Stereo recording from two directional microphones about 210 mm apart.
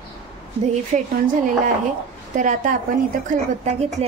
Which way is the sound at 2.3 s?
40° right (ahead or behind).